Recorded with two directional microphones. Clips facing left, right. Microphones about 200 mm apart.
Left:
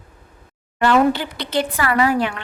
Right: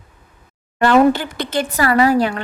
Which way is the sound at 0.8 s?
45° right (ahead or behind).